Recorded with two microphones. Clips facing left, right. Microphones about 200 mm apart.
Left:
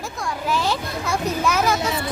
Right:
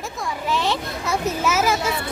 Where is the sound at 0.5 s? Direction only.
Centre (ahead or behind).